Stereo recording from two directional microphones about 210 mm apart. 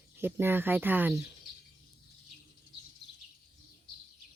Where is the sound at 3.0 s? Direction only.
55° left (ahead or behind).